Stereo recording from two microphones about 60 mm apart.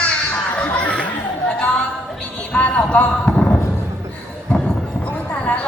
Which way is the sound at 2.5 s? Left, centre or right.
Centre.